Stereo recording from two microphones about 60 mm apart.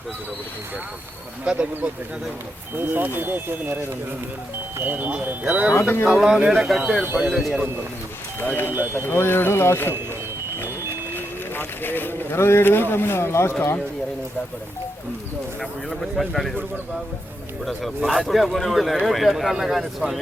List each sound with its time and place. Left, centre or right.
1.5 s speech: right
2.7 s speech: right
5.8 s speech: left
6.1 s speech: centre
7.0 s speech: right
8.7 s speech: right
9.1 s speech: left
11.1 s speech: left
15.9 s speech: centre
17.7 s speech: centre